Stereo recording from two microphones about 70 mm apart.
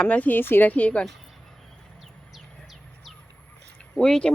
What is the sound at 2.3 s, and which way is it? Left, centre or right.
Bird, centre.